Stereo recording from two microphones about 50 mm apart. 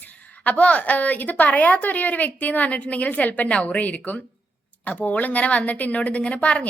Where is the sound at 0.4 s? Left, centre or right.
Left.